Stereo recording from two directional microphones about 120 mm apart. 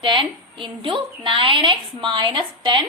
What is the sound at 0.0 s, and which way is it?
A woman's voice, 45° right (ahead or behind).